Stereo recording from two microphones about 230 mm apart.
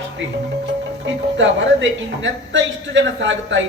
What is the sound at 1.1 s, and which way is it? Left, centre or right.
A woman's voice, right.